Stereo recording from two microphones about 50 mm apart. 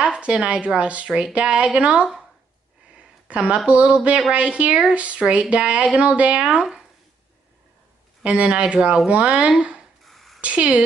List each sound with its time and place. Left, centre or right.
0.2 s speech: right
3.3 s speech: right
8.2 s speech: right
10.0 s a sound: centre
10.4 s speech: right